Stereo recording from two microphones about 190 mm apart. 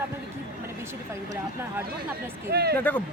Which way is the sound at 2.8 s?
10° left (ahead or behind).